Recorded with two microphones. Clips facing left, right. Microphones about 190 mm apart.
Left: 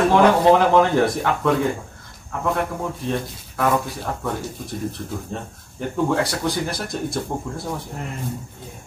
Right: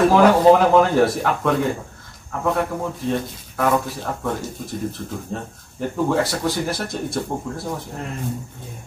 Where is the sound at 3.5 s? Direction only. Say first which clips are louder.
Right 1 dB; centre (ahead or behind).